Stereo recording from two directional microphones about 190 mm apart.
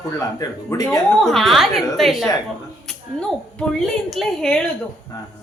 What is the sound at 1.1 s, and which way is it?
A woman's voice, centre (ahead or behind).